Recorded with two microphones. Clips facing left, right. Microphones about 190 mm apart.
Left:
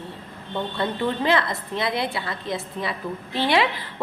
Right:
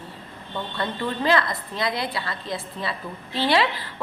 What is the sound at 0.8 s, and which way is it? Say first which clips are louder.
A woman's voice: left 2 dB; 20° left (ahead or behind).